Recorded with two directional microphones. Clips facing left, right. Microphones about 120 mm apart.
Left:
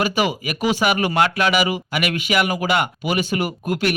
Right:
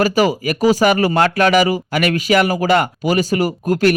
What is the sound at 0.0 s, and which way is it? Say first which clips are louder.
Speech: right 6 dB; 40° right (ahead or behind).